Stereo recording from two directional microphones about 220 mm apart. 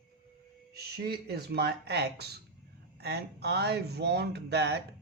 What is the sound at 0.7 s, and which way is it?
Speech, 45° right (ahead or behind).